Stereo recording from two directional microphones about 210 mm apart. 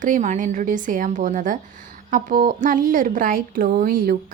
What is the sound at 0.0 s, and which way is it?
A woman's voice, 35° right (ahead or behind).